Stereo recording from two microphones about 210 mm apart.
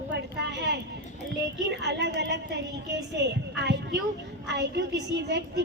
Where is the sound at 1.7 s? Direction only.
55° right (ahead or behind).